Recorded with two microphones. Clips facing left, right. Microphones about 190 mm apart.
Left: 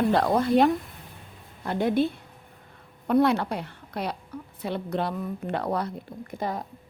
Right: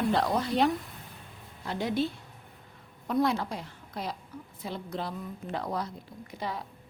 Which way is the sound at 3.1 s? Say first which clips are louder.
Left 6 dB; 65° left (ahead or behind).